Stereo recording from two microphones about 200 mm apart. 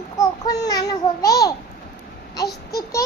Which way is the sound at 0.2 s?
20° left (ahead or behind).